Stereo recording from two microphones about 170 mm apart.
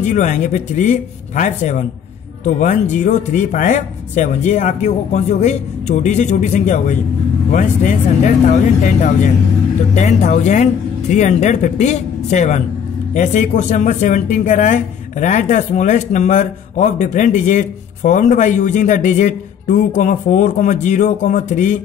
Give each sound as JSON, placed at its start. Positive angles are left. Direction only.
{"t": 0.0, "sound": "speech", "side_deg": 45}